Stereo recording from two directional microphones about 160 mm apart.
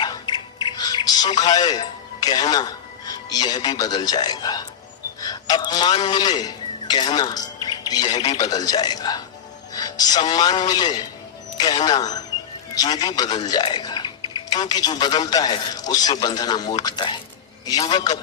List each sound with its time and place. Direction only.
0.0 s music: 25° left (ahead or behind)
5.2 s speech: 25° left (ahead or behind)